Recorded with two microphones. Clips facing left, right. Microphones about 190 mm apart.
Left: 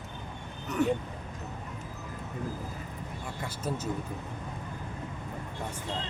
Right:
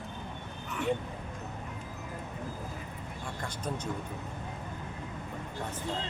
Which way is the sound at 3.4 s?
5° left (ahead or behind).